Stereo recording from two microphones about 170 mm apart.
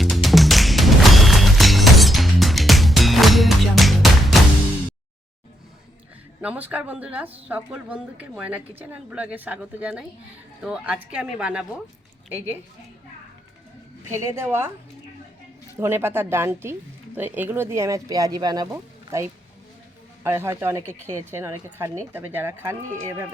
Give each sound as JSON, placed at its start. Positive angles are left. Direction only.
{"t": 0.0, "sound": "music", "side_deg": 0}
{"t": 6.4, "sound": "speech", "side_deg": -10}
{"t": 14.3, "sound": "speech", "side_deg": -15}
{"t": 15.8, "sound": "speech", "side_deg": -15}